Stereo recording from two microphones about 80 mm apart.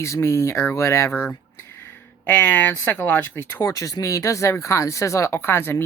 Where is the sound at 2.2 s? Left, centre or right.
Left.